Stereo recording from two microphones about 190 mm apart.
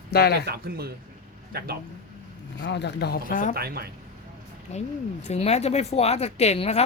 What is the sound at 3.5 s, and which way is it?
Speech, 55° right (ahead or behind).